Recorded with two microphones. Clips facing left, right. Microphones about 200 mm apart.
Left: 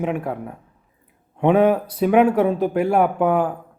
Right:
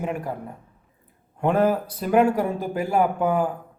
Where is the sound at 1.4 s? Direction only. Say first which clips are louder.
Left 5 dB; centre (ahead or behind).